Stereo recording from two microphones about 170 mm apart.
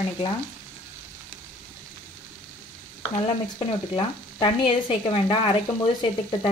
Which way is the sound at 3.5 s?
30° left (ahead or behind).